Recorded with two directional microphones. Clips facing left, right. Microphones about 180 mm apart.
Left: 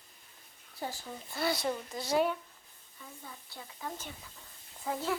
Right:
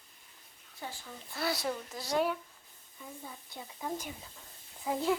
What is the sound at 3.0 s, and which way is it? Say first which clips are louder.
Speech: right 3 dB; 15° right (ahead or behind).